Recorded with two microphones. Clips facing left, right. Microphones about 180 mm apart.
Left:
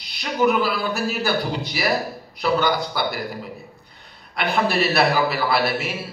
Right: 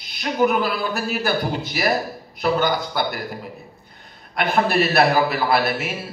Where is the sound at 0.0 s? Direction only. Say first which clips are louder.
Right 2 dB; 45° right (ahead or behind).